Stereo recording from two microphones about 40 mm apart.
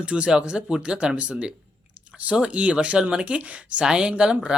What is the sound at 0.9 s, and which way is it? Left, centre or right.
Speech, right.